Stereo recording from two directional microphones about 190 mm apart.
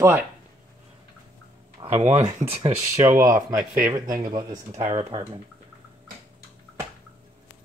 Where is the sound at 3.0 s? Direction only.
15° right (ahead or behind).